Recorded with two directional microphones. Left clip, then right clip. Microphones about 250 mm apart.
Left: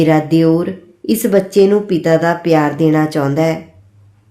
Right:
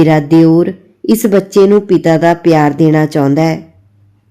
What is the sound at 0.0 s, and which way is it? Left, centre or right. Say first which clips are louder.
A woman's voice: right 4 dB; right.